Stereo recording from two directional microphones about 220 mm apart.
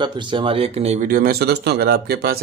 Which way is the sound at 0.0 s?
20° right (ahead or behind).